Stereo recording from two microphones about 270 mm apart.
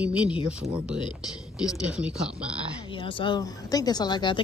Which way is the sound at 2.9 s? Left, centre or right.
Centre.